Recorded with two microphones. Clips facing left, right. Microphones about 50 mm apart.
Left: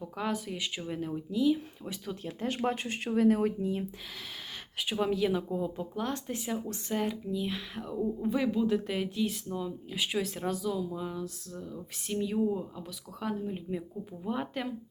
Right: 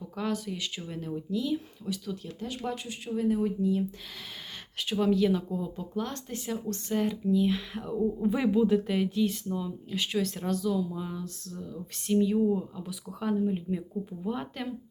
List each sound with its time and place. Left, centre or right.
0.0 s speech: centre
1.8 s speech: left
2.6 s speech: left
3.6 s speech: left
4.8 s speech: centre